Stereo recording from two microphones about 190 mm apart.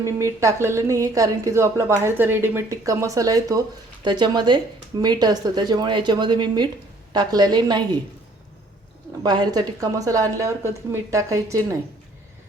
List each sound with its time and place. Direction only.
0.0 s a woman's voice: 15° right (ahead or behind)
9.2 s a woman's voice: 20° right (ahead or behind)